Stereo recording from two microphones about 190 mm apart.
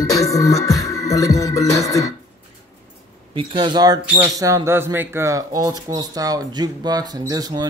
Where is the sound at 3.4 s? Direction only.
25° right (ahead or behind).